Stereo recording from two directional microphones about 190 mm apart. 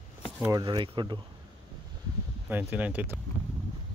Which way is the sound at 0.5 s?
20° right (ahead or behind).